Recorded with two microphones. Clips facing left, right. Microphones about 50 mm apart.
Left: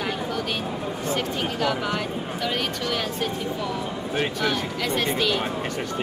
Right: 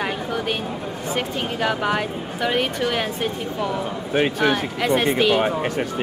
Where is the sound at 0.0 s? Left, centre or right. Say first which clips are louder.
Right 3 dB; right.